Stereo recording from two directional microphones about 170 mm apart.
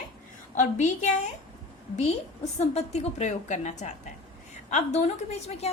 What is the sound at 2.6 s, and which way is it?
A woman's voice, 40° left (ahead or behind).